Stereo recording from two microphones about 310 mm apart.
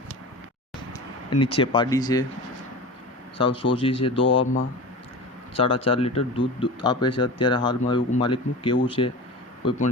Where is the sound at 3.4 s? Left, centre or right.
Centre.